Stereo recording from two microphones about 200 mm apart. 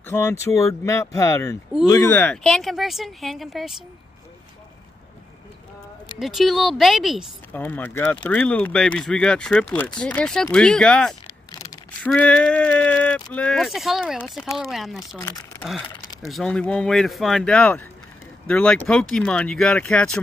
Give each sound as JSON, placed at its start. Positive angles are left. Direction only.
{"t": 0.1, "sound": "speech", "side_deg": 15}
{"t": 6.1, "sound": "speech", "side_deg": 0}
{"t": 7.6, "sound": "speech", "side_deg": 10}
{"t": 11.2, "sound": "a sound", "side_deg": 15}
{"t": 12.1, "sound": "speech", "side_deg": 5}
{"t": 15.1, "sound": "speech", "side_deg": 15}
{"t": 15.9, "sound": "a sound", "side_deg": 20}
{"t": 16.3, "sound": "speech", "side_deg": 0}